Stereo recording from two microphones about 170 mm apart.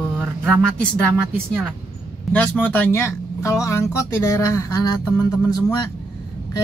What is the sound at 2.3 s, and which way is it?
Speech, 10° left (ahead or behind).